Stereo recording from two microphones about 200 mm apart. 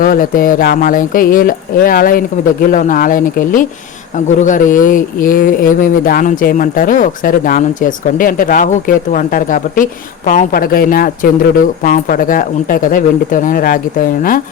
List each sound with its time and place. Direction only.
0.0 s speech: 45° left (ahead or behind)